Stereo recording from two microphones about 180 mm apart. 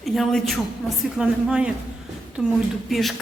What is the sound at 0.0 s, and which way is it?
A woman's voice, centre (ahead or behind).